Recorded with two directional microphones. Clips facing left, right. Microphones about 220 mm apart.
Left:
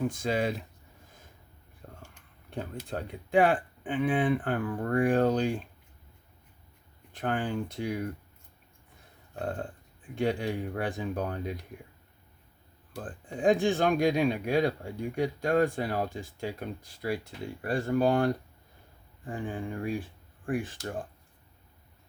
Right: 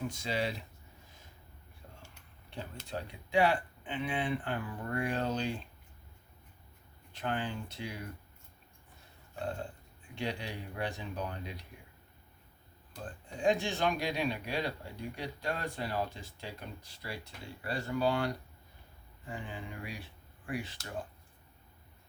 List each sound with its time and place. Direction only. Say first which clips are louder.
0.1 s speech: left 6 dB; 50° left (ahead or behind)
1.8 s a sound: left 6 dB; 50° left (ahead or behind)
2.5 s speech: left 6 dB; 50° left (ahead or behind)
7.1 s speech: left 5 dB; 50° left (ahead or behind)
9.4 s speech: left 4 dB; 50° left (ahead or behind)
12.9 s speech: left 6 dB; 50° left (ahead or behind)